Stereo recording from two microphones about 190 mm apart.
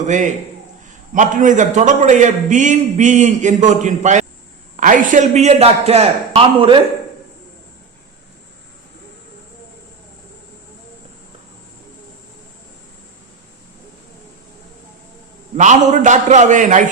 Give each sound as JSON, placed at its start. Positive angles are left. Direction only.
{"t": 0.0, "sound": "a man's voice", "side_deg": -40}
{"t": 15.5, "sound": "a man's voice", "side_deg": -40}